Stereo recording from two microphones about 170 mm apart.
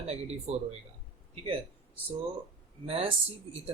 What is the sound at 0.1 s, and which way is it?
Speech, 40° right (ahead or behind).